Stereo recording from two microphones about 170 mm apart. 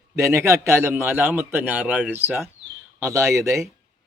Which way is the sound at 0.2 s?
15° right (ahead or behind).